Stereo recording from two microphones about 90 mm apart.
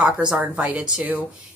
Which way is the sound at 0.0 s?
10° right (ahead or behind).